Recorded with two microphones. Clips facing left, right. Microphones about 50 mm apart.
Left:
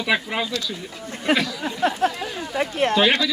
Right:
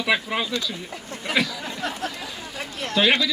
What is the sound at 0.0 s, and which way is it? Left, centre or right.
Speech, centre.